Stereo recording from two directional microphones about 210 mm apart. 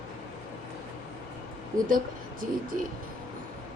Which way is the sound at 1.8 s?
40° right (ahead or behind).